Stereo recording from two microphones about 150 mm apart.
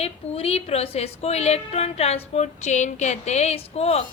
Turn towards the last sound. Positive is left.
turn(degrees=45)  # may be behind; listen again after turning